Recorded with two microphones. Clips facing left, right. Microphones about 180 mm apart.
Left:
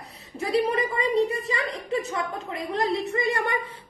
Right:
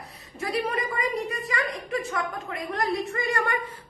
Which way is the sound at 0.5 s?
25° left (ahead or behind).